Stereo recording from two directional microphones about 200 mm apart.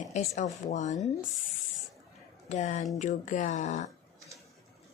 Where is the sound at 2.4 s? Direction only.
35° left (ahead or behind).